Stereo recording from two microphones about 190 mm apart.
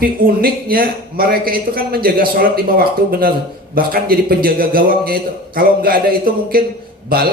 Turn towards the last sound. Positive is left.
turn(degrees=-50)  # may be behind; listen again after turning